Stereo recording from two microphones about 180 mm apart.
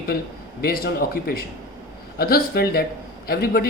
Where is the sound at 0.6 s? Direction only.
55° left (ahead or behind).